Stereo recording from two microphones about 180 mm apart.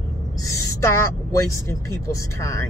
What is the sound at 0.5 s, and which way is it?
Speech, 15° left (ahead or behind).